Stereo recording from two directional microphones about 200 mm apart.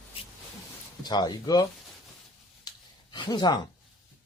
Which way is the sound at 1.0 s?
20° left (ahead or behind).